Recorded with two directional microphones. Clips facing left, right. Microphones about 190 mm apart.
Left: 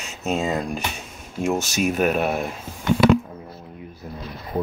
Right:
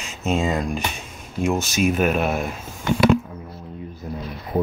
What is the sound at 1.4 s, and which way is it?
Speech, 45° left (ahead or behind).